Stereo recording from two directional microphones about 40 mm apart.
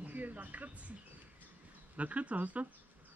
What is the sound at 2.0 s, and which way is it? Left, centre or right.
Speech, right.